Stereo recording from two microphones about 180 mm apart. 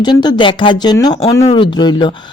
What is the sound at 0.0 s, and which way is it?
Speech, 25° left (ahead or behind).